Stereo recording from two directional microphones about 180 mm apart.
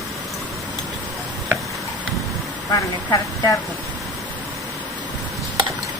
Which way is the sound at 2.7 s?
20° left (ahead or behind).